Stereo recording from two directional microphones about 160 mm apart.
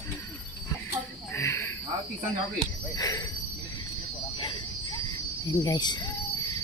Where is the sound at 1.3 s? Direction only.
15° left (ahead or behind).